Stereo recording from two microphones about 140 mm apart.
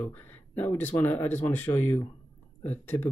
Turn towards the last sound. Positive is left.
turn(degrees=15)  # may be behind; listen again after turning